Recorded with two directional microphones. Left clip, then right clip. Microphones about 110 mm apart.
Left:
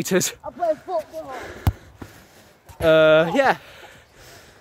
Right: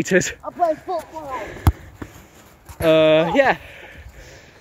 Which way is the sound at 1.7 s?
35° left (ahead or behind).